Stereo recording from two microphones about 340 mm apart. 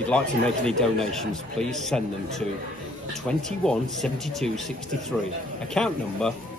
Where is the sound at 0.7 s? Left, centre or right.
Centre.